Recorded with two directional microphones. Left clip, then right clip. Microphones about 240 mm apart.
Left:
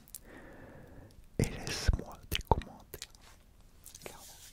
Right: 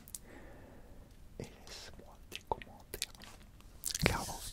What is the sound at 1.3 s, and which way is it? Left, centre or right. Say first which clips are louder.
Whispering: left 12 dB; left.